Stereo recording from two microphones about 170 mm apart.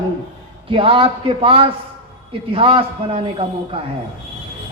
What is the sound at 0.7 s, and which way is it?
A man's voice, 30° right (ahead or behind).